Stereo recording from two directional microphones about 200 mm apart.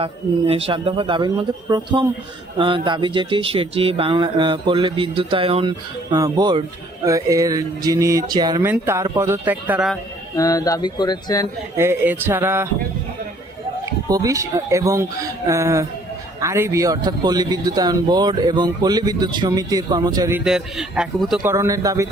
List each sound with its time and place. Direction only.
0.0 s speech: 30° right (ahead or behind); by 10.0 s 5° right (ahead or behind)
10.3 s speech: 15° left (ahead or behind)
11.8 s speech: 10° right (ahead or behind)
14.1 s speech: 15° right (ahead or behind)
20.4 s a man's voice: 5° right (ahead or behind)
21.4 s speech: 15° right (ahead or behind)